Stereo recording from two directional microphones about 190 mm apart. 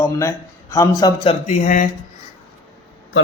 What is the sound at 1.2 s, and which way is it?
Speech, 35° left (ahead or behind).